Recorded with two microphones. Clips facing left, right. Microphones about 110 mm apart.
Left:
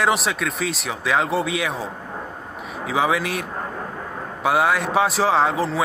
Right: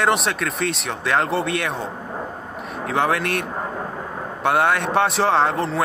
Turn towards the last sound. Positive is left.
turn(degrees=0)  # may be behind; listen again after turning